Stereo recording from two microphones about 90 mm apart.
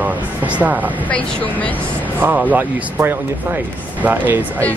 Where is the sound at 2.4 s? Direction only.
20° right (ahead or behind).